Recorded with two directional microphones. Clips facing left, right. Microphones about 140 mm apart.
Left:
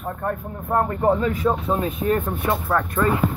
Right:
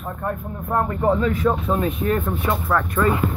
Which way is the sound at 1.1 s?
25° left (ahead or behind).